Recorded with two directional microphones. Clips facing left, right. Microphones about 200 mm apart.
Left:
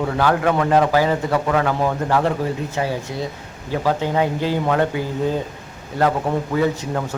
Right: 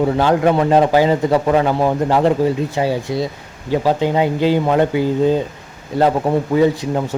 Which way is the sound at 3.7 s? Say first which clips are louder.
Right 4 dB; 20° right (ahead or behind).